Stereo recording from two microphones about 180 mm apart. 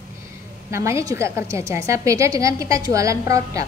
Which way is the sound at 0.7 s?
15° right (ahead or behind).